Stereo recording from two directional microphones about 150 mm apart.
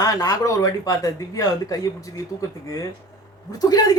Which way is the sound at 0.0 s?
25° left (ahead or behind).